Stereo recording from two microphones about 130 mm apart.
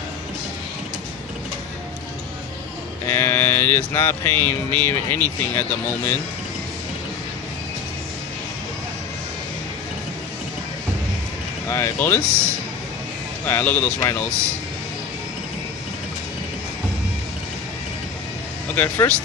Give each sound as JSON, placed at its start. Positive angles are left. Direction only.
{"t": 3.1, "sound": "music", "side_deg": 20}
{"t": 11.7, "sound": "speech", "side_deg": 20}
{"t": 13.5, "sound": "music", "side_deg": 15}
{"t": 18.8, "sound": "music", "side_deg": 15}